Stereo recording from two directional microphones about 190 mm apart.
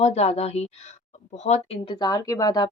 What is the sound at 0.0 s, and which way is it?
A woman's voice, 35° left (ahead or behind).